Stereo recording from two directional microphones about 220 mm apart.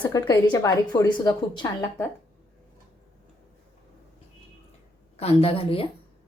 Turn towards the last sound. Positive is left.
turn(degrees=25)  # may be behind; listen again after turning